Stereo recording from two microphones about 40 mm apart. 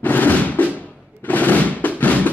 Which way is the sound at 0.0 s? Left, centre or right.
Left.